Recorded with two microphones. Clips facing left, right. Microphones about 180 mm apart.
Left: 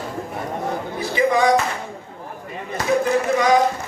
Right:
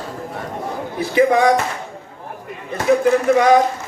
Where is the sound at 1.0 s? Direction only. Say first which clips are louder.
Right 4 dB; 55° right (ahead or behind).